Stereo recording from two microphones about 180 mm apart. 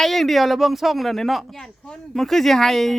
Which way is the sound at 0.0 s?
Centre (ahead or behind).